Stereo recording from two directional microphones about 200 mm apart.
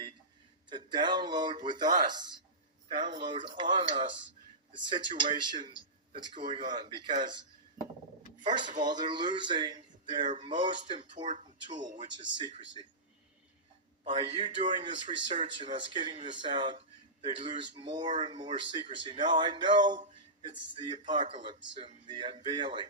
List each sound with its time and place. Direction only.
0.7 s a man's voice: 20° right (ahead or behind)
2.9 s speech: 20° right (ahead or behind)
8.4 s speech: 20° right (ahead or behind)
14.1 s speech: 25° right (ahead or behind)